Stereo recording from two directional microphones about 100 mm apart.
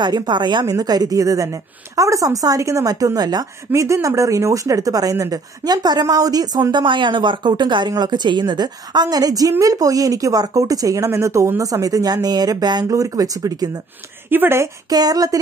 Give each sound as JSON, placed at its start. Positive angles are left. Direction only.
{"t": 0.0, "sound": "speech", "side_deg": -45}
{"t": 6.7, "sound": "speech", "side_deg": -50}
{"t": 14.3, "sound": "speech", "side_deg": -25}
{"t": 14.9, "sound": "speech", "side_deg": -40}